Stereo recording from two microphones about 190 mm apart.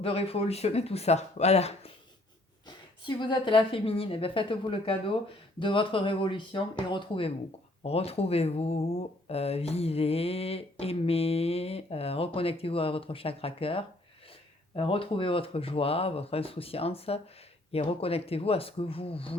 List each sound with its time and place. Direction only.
0.0 s a woman's voice: 30° left (ahead or behind)